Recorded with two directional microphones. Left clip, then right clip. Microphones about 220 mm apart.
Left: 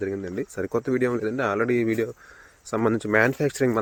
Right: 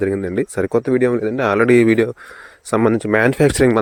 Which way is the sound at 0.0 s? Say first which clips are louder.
Right 10 dB; 40° right (ahead or behind).